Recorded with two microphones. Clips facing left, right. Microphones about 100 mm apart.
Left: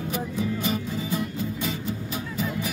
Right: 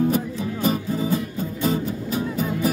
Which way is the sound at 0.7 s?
40° right (ahead or behind).